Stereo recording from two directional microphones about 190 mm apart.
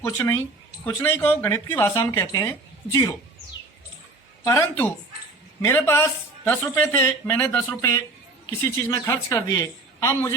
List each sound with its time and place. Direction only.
0.0 s speech: 15° left (ahead or behind)
4.4 s speech: 15° left (ahead or behind)